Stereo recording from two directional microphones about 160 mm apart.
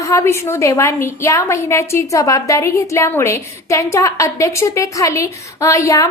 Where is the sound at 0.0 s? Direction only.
20° left (ahead or behind).